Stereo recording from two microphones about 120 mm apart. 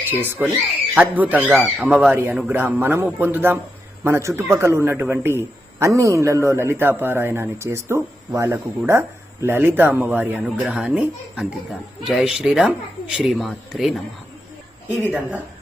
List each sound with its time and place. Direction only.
0.1 s a man's voice: 15° right (ahead or behind); by 14.0 s centre (ahead or behind)
14.8 s speech: 15° right (ahead or behind)